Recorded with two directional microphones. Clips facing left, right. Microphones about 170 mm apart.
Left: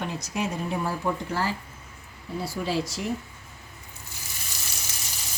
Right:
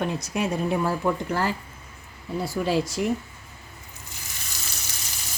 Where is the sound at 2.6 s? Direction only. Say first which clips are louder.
Right 4 dB; 50° right (ahead or behind).